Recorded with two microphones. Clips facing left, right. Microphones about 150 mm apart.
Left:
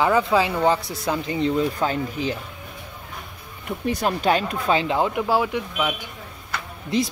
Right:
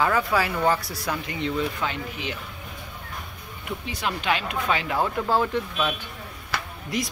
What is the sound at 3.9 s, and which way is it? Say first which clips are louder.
Speech: left 6 dB; 40° left (ahead or behind).